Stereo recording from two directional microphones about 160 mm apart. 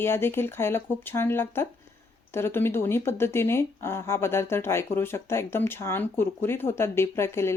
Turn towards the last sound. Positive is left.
turn(degrees=15)  # may be behind; listen again after turning